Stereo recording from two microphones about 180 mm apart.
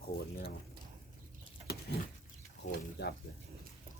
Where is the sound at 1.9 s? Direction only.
65° left (ahead or behind).